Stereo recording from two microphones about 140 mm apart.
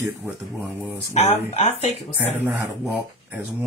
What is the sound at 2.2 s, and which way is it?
Speech, 15° right (ahead or behind).